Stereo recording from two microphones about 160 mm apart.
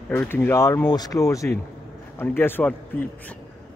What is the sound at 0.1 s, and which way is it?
Speech, 10° left (ahead or behind).